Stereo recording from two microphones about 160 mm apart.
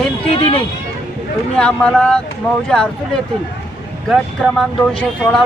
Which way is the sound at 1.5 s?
5° left (ahead or behind).